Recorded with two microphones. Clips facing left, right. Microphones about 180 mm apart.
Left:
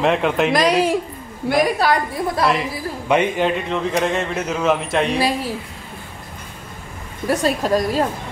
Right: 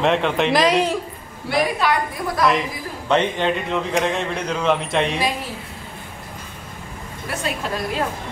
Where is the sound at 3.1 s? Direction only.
10° left (ahead or behind).